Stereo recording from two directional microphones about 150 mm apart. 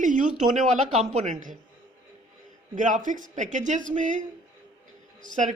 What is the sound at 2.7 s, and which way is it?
A man's voice, 55° right (ahead or behind).